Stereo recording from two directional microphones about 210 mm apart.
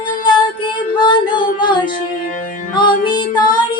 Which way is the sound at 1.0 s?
20° left (ahead or behind).